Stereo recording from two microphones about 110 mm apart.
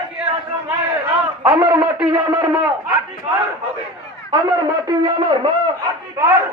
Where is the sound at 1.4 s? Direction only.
40° right (ahead or behind).